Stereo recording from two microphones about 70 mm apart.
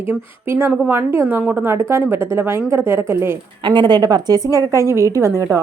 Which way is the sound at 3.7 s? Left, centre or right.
Right.